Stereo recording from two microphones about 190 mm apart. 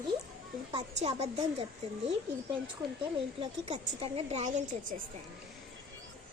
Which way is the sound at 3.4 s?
35° right (ahead or behind).